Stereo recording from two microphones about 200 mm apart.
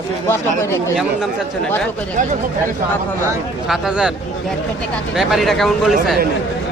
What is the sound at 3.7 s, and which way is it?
Speech, 5° right (ahead or behind).